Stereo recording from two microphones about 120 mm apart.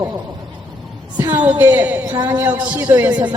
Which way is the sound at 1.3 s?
15° right (ahead or behind).